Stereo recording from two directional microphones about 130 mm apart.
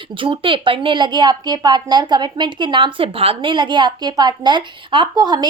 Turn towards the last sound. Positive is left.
turn(degrees=-30)  # may be behind; listen again after turning